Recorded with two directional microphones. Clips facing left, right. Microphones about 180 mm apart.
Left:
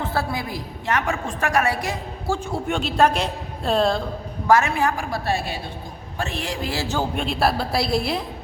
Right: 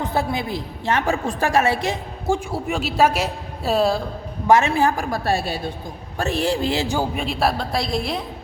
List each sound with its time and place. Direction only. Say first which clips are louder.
0.0 s a woman's voice: right 2 dB; 20° right (ahead or behind)
2.5 s a woman's voice: even; 5° right (ahead or behind)
4.4 s a woman's voice: right 2 dB; 20° right (ahead or behind)
4.7 s a woman's voice: right 3 dB; 35° right (ahead or behind); by 7.1 s 15° right (ahead or behind)
7.2 s a woman's voice: even; centre (ahead or behind)